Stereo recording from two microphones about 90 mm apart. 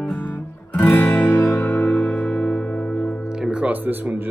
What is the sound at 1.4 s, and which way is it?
Music, centre (ahead or behind).